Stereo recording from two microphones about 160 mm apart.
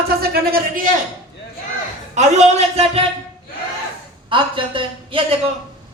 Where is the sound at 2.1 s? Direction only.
45° right (ahead or behind).